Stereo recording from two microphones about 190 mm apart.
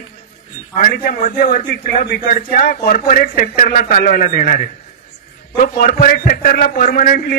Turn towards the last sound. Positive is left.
turn(degrees=45)  # may be behind; listen again after turning